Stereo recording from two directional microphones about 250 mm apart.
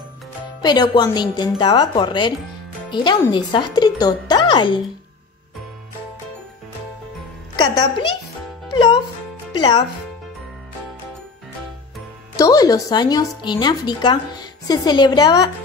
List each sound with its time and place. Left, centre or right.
0.6 s speech: centre
7.5 s a child's voice: centre
12.4 s speech: centre